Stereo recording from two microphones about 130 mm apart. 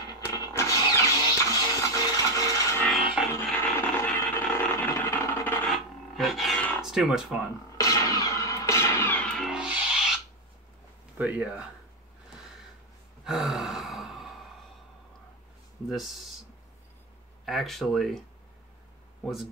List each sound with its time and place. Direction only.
0.3 s a sound: 25° left (ahead or behind)
1.5 s music: 30° left (ahead or behind)
2.9 s music: 5° right (ahead or behind)
3.5 s a sound: 15° left (ahead or behind)
5.7 s a sound: centre (ahead or behind)
6.8 s speech: 5° right (ahead or behind)
7.7 s music: 25° left (ahead or behind)
9.2 s music: centre (ahead or behind)
11.1 s speech: 10° right (ahead or behind)
13.2 s gasp: 5° right (ahead or behind)
15.9 s speech: centre (ahead or behind)
17.5 s speech: centre (ahead or behind)
19.2 s speech: centre (ahead or behind)